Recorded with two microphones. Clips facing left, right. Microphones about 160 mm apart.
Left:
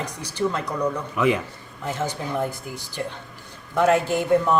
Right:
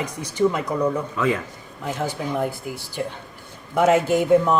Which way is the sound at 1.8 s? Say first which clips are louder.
Right 1 dB; centre (ahead or behind).